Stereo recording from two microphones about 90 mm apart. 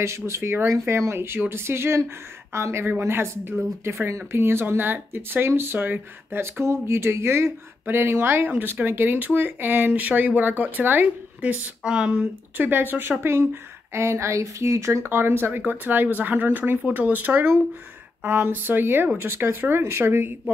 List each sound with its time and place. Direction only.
0.3 s speech: 30° right (ahead or behind); by 12.3 s 10° right (ahead or behind)
12.5 s speech: 20° right (ahead or behind)